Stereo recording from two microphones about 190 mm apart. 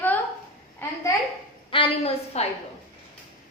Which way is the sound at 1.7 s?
25° left (ahead or behind).